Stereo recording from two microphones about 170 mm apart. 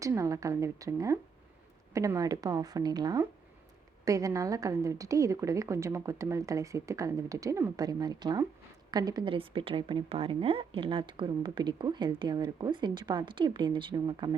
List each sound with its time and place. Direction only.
0.0 s a woman's voice: 20° right (ahead or behind)